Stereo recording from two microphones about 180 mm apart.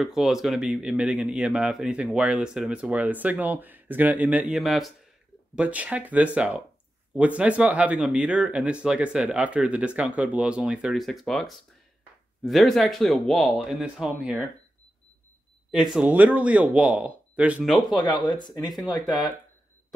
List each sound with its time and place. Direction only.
0.0 s speech: centre (ahead or behind)
15.7 s speech: 5° right (ahead or behind)
17.9 s speech: 25° left (ahead or behind)
18.7 s speech: centre (ahead or behind)